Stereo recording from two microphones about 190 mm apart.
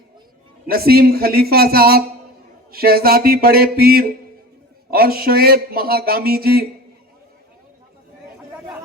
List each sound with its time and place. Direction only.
0.7 s speech: 55° right (ahead or behind)